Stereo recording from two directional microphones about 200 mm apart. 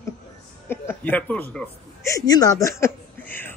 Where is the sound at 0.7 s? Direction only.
10° left (ahead or behind).